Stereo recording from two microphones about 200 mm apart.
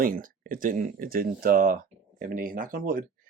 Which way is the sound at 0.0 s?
45° right (ahead or behind).